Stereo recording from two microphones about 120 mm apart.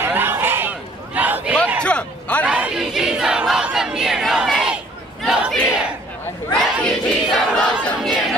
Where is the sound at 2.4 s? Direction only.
10° right (ahead or behind).